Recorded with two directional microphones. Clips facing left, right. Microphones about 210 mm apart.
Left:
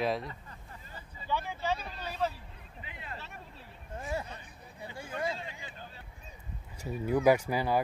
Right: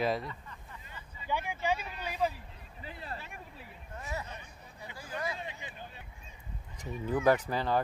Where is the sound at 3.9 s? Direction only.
30° left (ahead or behind).